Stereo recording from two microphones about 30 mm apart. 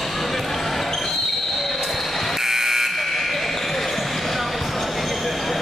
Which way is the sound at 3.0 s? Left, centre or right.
Centre.